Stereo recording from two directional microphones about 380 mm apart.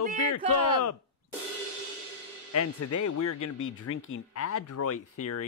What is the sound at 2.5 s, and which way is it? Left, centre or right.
Speech, left.